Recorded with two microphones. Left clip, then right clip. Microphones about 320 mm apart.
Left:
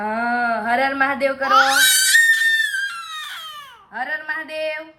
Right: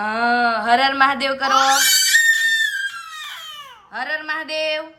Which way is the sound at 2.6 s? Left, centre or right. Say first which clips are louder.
Even; left.